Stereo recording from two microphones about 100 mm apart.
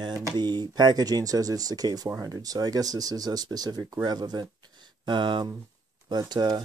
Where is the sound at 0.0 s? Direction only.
45° right (ahead or behind).